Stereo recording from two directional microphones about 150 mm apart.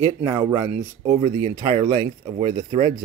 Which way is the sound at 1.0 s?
50° right (ahead or behind).